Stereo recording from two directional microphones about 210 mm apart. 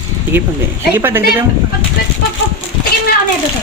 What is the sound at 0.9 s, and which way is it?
Speech, 10° right (ahead or behind).